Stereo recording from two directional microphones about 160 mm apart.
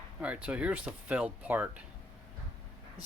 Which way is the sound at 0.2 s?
10° right (ahead or behind).